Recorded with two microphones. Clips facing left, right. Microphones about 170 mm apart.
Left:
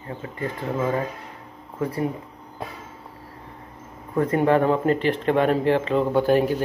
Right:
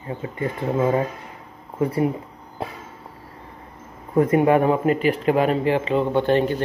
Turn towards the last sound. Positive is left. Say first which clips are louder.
# even
turn(degrees=5)  # may be behind; listen again after turning